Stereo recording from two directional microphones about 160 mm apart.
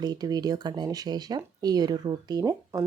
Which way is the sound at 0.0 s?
25° right (ahead or behind).